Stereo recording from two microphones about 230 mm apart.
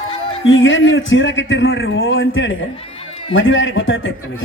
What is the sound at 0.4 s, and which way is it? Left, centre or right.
A man's voice, left.